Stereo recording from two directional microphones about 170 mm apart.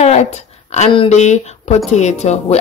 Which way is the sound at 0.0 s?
40° left (ahead or behind).